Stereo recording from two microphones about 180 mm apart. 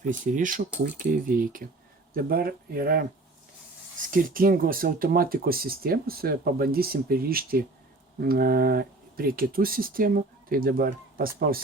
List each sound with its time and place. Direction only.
0.0 s speech: 45° right (ahead or behind)
4.1 s speech: 50° right (ahead or behind)